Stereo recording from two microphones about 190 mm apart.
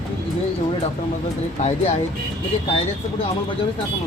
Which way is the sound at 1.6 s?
40° left (ahead or behind).